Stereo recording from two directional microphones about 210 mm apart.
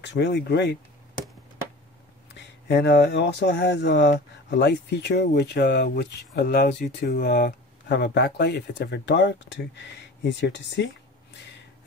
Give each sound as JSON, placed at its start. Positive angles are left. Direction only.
{"t": 0.0, "sound": "speech", "side_deg": 55}
{"t": 2.3, "sound": "speech", "side_deg": 55}